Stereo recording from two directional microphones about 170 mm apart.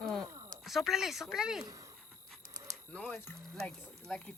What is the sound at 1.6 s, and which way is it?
Speech, 20° right (ahead or behind).